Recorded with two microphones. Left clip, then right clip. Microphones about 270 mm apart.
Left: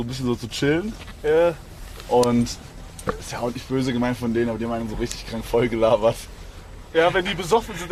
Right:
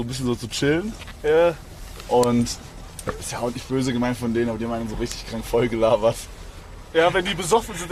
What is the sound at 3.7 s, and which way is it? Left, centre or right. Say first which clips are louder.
A man's voice: even; centre.